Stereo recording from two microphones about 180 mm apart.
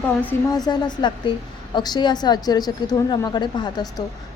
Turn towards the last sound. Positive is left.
turn(degrees=25)  # may be behind; listen again after turning